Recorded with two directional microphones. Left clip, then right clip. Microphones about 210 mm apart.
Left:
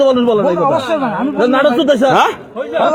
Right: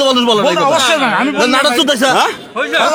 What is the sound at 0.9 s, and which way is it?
A man's voice, 35° right (ahead or behind).